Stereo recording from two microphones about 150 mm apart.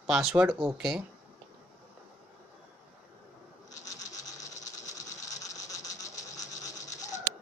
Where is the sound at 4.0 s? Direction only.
55° left (ahead or behind).